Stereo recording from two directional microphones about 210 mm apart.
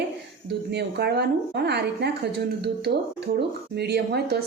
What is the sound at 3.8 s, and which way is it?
Speech, 50° right (ahead or behind).